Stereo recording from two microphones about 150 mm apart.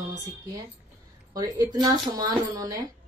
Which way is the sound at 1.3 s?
25° right (ahead or behind).